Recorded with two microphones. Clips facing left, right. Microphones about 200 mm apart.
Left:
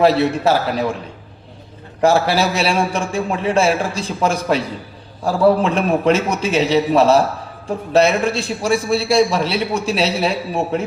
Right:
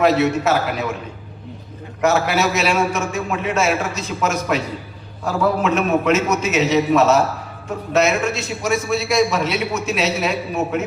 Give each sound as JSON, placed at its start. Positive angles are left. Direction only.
{"t": 0.0, "sound": "a man's voice", "side_deg": 30}
{"t": 2.0, "sound": "a man's voice", "side_deg": 30}